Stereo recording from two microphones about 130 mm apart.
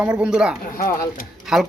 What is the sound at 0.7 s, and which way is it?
Speech, 90° left.